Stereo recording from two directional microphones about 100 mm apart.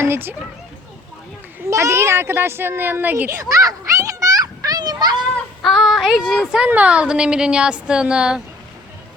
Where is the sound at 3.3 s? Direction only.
35° right (ahead or behind).